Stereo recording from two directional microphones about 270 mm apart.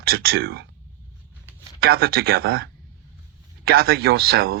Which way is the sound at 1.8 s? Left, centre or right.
Right.